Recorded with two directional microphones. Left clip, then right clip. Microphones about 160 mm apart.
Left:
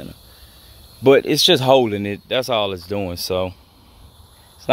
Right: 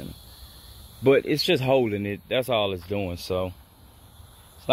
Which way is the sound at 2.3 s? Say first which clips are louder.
Left 4 dB; 10° left (ahead or behind).